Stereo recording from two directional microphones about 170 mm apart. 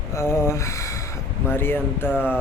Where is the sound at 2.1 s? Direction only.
5° right (ahead or behind).